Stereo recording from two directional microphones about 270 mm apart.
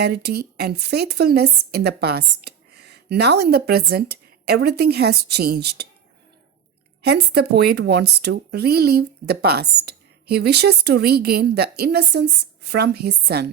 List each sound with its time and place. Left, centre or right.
0.0 s a woman's voice: right
7.0 s a woman's voice: right